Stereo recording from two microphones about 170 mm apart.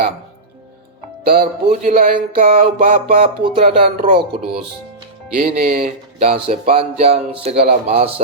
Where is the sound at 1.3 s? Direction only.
55° right (ahead or behind).